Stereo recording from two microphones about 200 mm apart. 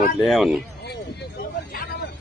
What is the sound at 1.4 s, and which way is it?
Vehicle, 45° left (ahead or behind).